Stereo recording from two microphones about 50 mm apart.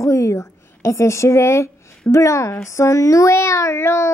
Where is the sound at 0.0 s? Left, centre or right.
Left.